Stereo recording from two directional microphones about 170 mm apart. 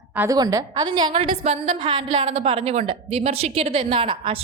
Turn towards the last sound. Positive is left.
turn(degrees=-30)  # may be behind; listen again after turning